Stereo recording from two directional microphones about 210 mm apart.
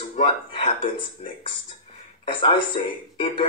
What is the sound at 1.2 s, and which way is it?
A woman's voice, 30° left (ahead or behind).